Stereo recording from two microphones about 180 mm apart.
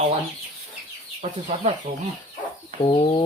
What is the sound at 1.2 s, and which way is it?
Speech, 35° right (ahead or behind).